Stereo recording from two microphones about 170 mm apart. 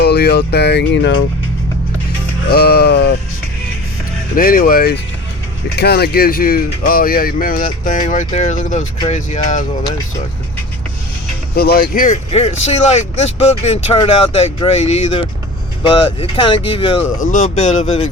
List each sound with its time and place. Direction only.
0.0 s speech: 70° left (ahead or behind); by 1.1 s 85° left
2.5 s speech: 65° left (ahead or behind)
4.4 s speech: 55° left (ahead or behind)
5.7 s speech: 70° left (ahead or behind); by 9.6 s 45° left (ahead or behind)
11.5 s speech: 65° left (ahead or behind); by 17.0 s 30° left (ahead or behind)
17.2 s speech: 50° left (ahead or behind)